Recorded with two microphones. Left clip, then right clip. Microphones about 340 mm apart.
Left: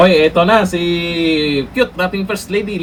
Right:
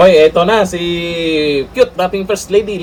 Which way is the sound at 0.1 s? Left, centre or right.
Centre.